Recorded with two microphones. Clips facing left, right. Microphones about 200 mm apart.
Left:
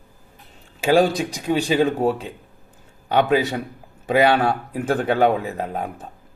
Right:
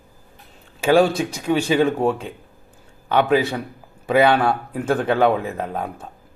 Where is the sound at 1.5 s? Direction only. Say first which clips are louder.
Right 1 dB; 35° left (ahead or behind).